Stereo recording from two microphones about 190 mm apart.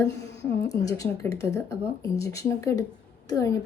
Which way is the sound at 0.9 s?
20° left (ahead or behind).